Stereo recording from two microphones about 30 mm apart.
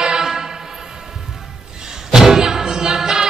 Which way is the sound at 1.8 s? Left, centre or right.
Right.